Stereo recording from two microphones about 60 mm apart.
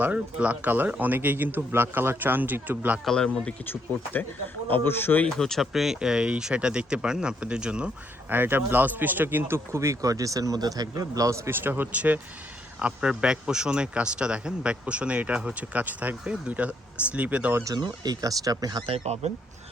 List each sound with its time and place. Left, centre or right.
0.0 s a man's voice: right
3.7 s speech: left
5.3 s speech: centre
8.3 s a man's voice: right
9.7 s speech: right
11.4 s a man's voice: right
11.9 s speech: right
17.6 s speech: right